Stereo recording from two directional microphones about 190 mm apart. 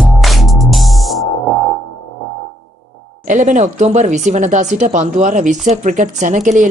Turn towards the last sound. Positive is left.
turn(degrees=-40)  # may be behind; listen again after turning